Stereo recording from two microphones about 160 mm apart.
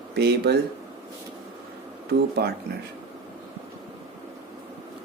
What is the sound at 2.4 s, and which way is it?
Speech, 90° right.